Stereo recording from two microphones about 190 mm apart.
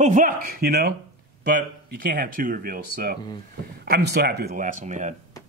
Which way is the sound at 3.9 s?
60° right (ahead or behind).